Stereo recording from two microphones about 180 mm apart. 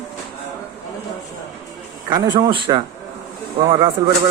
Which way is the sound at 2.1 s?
25° right (ahead or behind).